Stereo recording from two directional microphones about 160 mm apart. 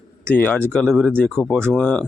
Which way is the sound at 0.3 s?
10° left (ahead or behind).